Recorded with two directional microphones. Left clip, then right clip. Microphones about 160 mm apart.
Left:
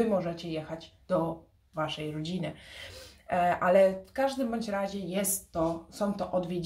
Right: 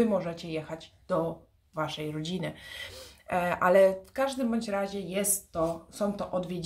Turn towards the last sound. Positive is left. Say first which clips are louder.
# left 2 dB
turn(degrees=-20)  # may be behind; listen again after turning